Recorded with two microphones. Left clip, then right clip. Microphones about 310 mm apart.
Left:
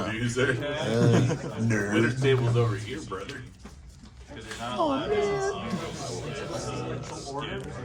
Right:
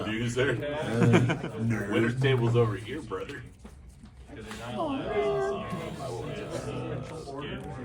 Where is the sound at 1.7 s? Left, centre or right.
Left.